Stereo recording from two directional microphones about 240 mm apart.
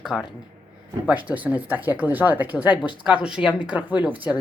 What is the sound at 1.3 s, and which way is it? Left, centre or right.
A woman's voice, centre.